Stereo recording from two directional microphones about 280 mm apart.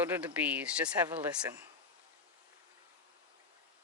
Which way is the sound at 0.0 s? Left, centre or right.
Centre.